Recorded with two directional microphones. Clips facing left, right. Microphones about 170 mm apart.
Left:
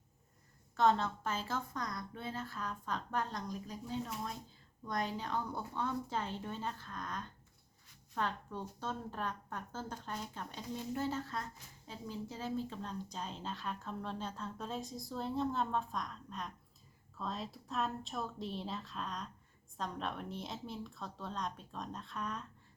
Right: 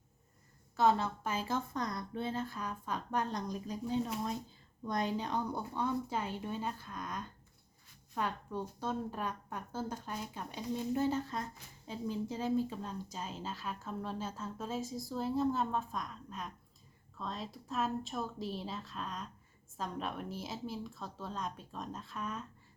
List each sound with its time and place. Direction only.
0.8 s a woman's voice: 10° right (ahead or behind)
12.7 s speech: 5° right (ahead or behind)